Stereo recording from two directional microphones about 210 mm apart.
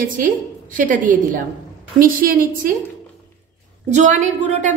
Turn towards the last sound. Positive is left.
turn(degrees=-35)  # may be behind; listen again after turning